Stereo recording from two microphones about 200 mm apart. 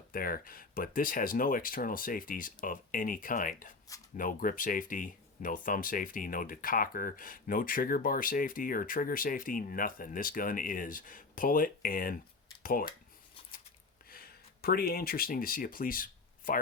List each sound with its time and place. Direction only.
0.1 s speech: 45° left (ahead or behind)
14.1 s speech: 50° left (ahead or behind)